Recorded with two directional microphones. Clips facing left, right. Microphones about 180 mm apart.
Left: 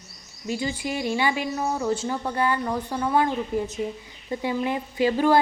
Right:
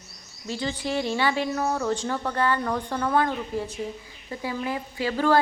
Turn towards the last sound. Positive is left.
turn(degrees=15)  # may be behind; listen again after turning